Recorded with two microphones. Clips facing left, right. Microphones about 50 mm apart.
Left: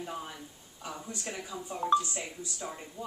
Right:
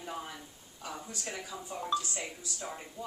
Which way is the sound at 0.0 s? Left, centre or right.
Centre.